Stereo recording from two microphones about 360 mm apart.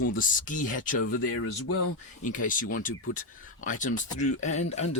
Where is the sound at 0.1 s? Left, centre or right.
Left.